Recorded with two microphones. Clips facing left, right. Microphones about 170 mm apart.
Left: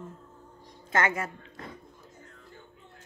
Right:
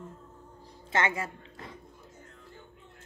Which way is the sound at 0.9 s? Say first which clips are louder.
Left 2 dB; 25° right (ahead or behind).